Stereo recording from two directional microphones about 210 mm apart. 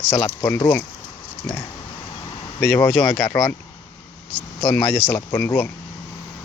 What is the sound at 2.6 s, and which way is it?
Speech, 10° left (ahead or behind).